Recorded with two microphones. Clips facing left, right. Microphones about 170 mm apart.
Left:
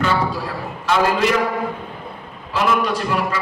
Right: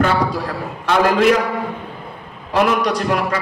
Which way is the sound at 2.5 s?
70° right (ahead or behind).